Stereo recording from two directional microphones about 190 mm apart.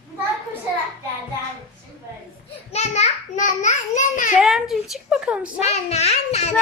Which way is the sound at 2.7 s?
35° left (ahead or behind).